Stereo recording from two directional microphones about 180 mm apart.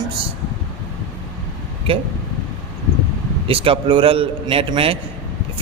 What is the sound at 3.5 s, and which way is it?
Speech, 30° right (ahead or behind).